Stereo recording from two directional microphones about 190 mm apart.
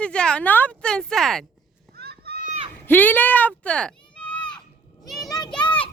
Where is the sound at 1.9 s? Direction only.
55° right (ahead or behind).